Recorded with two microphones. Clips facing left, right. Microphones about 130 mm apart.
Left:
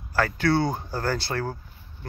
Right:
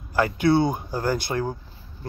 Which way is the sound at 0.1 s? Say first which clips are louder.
Right 3 dB; 20° right (ahead or behind).